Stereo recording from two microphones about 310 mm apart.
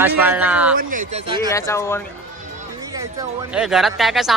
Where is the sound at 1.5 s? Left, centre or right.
Centre.